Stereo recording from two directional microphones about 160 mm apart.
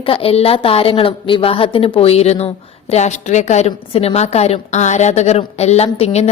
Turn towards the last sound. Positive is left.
turn(degrees=40)  # may be behind; listen again after turning